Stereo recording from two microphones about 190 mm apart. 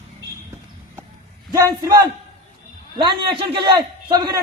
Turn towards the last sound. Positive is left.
turn(degrees=-25)  # may be behind; listen again after turning